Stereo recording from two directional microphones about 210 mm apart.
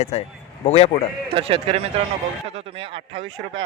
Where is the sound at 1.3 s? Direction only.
25° right (ahead or behind).